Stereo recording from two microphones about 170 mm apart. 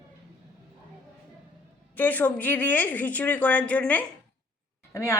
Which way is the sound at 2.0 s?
10° left (ahead or behind).